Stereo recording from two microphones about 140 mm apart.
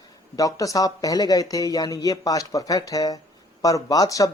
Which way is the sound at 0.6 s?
25° left (ahead or behind).